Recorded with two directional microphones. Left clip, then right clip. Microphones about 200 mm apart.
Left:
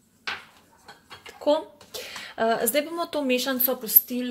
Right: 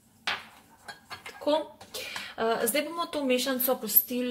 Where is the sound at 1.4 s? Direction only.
35° left (ahead or behind).